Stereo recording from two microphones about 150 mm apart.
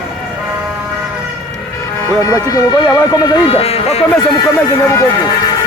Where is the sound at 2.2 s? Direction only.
20° left (ahead or behind); by 4.0 s 45° left (ahead or behind).